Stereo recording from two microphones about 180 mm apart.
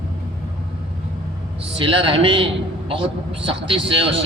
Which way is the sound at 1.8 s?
30° right (ahead or behind).